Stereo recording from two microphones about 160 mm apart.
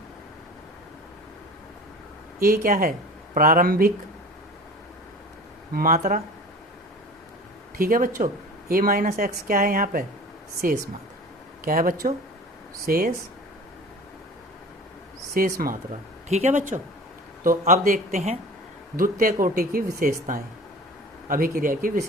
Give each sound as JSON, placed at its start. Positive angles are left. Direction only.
{"t": 2.4, "sound": "speech", "side_deg": -65}
{"t": 5.7, "sound": "speech", "side_deg": -60}
{"t": 7.8, "sound": "speech", "side_deg": -60}
{"t": 15.4, "sound": "speech", "side_deg": -65}
{"t": 16.3, "sound": "speech", "side_deg": -45}
{"t": 17.4, "sound": "speech", "side_deg": -60}